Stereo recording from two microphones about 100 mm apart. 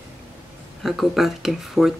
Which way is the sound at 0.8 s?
Centre (ahead or behind).